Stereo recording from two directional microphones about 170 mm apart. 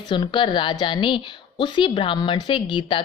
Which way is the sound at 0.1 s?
25° left (ahead or behind).